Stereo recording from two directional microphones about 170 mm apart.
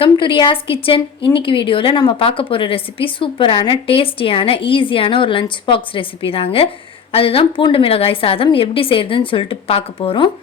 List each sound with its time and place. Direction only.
0.0 s a woman's voice: 30° left (ahead or behind)